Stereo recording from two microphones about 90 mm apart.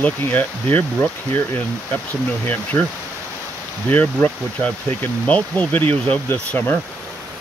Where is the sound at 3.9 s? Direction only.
15° left (ahead or behind).